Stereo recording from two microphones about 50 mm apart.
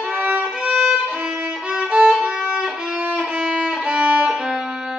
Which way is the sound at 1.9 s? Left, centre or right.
Centre.